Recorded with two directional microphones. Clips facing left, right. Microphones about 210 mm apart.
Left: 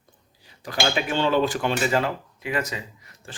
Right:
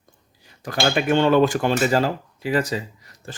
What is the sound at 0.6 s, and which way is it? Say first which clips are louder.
Speech: right 4 dB; 50° right (ahead or behind).